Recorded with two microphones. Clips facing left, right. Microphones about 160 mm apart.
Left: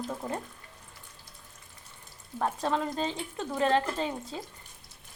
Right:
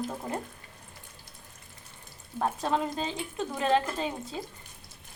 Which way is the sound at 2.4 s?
15° right (ahead or behind).